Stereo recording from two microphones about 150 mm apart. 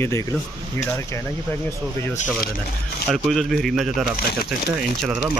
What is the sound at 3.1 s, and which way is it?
Speech, centre (ahead or behind).